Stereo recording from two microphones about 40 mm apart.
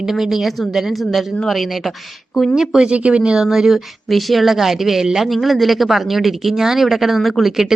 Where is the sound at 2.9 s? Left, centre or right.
Right.